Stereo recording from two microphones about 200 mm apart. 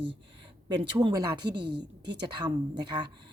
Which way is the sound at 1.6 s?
60° right (ahead or behind).